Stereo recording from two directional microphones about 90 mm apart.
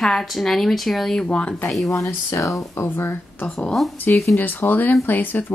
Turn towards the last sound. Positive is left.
turn(degrees=20)  # may be behind; listen again after turning